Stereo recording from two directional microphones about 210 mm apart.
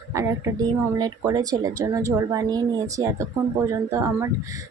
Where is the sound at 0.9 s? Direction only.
20° right (ahead or behind).